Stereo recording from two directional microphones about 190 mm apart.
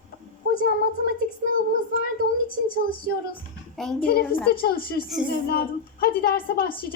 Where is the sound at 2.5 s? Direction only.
25° left (ahead or behind).